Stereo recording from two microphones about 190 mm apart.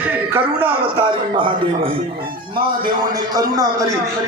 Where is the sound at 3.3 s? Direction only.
20° right (ahead or behind).